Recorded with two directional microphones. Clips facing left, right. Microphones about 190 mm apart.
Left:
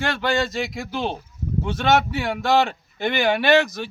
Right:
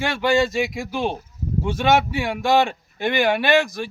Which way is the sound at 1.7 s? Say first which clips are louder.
Right 1 dB; centre (ahead or behind).